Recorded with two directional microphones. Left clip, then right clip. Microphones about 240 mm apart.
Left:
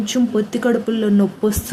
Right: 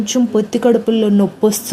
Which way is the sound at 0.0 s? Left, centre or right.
Centre.